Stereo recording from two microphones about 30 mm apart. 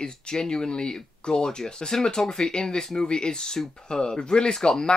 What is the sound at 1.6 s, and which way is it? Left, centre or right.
Speech, centre.